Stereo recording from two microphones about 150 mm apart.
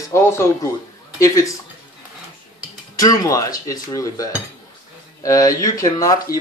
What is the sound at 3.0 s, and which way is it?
Speech, 25° left (ahead or behind).